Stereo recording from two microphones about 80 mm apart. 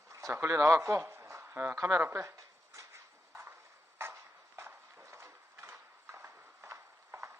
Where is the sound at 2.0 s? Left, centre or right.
Right.